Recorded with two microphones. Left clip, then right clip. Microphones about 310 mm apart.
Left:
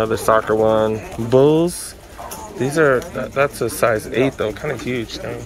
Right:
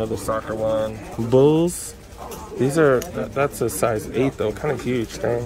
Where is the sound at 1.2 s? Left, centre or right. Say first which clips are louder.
Left 2 dB; centre.